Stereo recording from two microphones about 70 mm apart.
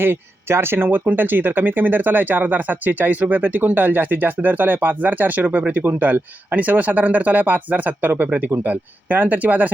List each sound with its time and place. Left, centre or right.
0.0 s speech: right